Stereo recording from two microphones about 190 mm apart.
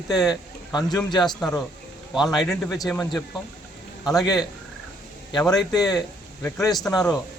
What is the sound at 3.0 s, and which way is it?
Speech, 20° left (ahead or behind).